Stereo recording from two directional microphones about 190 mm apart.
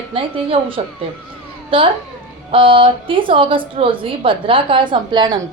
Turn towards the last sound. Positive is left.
turn(degrees=-25)  # may be behind; listen again after turning